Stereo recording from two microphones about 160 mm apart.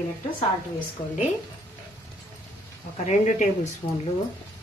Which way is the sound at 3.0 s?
50° left (ahead or behind).